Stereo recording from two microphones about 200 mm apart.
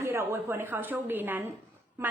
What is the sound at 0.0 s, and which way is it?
A woman's voice, 15° right (ahead or behind).